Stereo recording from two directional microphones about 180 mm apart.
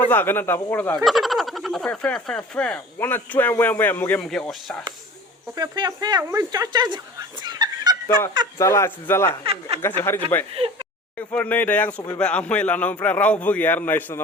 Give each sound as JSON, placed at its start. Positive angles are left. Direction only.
{"t": 0.1, "sound": "speech", "side_deg": 10}
{"t": 5.5, "sound": "speech", "side_deg": -25}
{"t": 8.5, "sound": "speech", "side_deg": 15}
{"t": 9.4, "sound": "speech", "side_deg": -35}
{"t": 10.0, "sound": "speech", "side_deg": 10}